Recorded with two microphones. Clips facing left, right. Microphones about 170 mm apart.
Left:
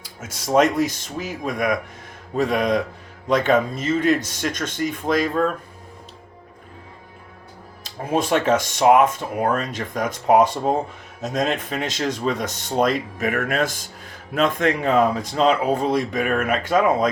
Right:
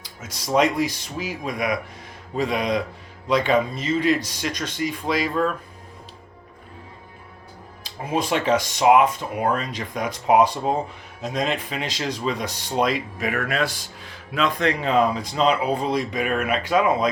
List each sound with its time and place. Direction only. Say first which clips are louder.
0.5 s speech: left 2 dB; 45° left (ahead or behind)
7.9 s speech: left 3 dB; 50° left (ahead or behind)